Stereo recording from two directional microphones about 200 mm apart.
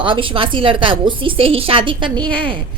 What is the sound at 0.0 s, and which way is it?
Speech, 25° right (ahead or behind).